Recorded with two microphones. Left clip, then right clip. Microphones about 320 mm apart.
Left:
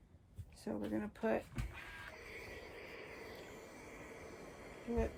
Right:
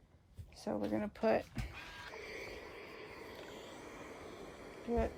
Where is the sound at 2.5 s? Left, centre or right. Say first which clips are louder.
Right 2 dB; centre.